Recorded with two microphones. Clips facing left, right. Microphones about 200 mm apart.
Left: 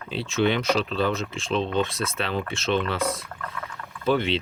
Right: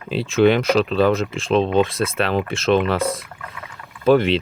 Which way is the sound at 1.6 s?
90° right.